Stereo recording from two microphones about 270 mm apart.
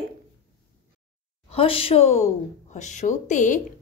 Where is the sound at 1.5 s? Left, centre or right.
Left.